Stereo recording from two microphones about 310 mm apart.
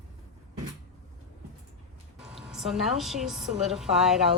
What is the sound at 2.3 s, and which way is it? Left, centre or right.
A woman's voice, centre.